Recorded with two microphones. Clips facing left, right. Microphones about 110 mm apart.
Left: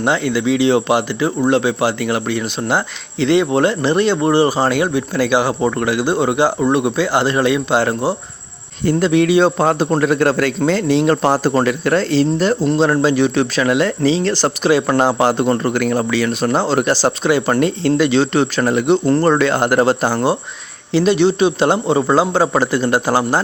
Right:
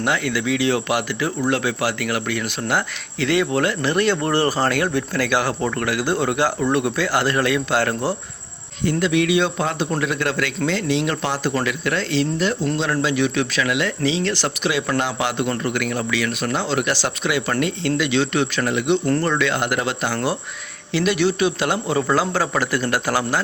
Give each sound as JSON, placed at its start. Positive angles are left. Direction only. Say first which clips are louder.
{"t": 0.0, "sound": "speech", "louder": "left 5 dB", "side_deg": 25}
{"t": 8.8, "sound": "speech", "louder": "left 5 dB", "side_deg": 40}
{"t": 20.1, "sound": "speech", "louder": "left 6 dB", "side_deg": 25}